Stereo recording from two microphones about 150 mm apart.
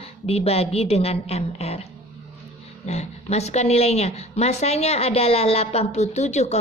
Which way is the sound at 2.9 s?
45° left (ahead or behind).